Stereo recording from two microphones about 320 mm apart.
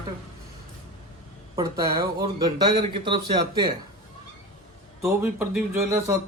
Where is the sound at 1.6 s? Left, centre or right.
Centre.